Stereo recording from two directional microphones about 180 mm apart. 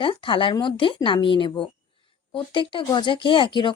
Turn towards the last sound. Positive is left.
turn(degrees=25)  # may be behind; listen again after turning